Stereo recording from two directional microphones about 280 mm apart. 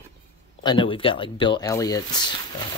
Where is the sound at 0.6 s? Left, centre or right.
Centre.